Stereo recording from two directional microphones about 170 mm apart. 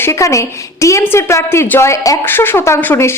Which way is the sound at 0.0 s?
15° left (ahead or behind).